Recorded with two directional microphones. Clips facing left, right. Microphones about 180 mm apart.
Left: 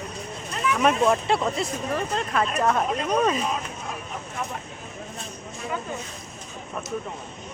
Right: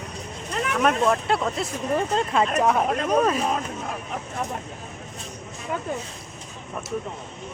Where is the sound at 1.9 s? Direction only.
25° right (ahead or behind).